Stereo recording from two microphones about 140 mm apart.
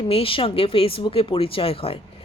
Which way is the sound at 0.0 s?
40° left (ahead or behind).